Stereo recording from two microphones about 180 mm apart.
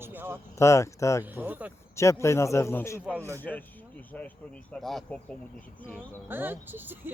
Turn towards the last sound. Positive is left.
turn(degrees=-10)  # may be behind; listen again after turning